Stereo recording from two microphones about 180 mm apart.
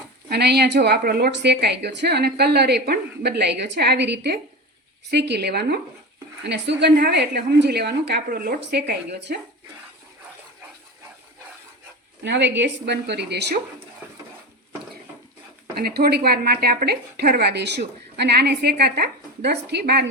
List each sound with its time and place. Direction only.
0.3 s speech: 65° right (ahead or behind)
6.4 s speech: 75° right (ahead or behind)
12.2 s a woman's voice: 75° right (ahead or behind)
15.7 s speech: 60° right (ahead or behind)